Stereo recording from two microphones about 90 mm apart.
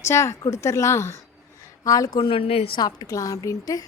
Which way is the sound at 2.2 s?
90° left.